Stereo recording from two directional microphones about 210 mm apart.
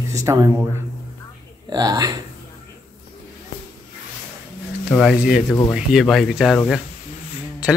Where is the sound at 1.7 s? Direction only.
20° right (ahead or behind).